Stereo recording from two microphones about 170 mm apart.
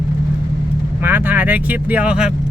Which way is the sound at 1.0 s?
10° right (ahead or behind).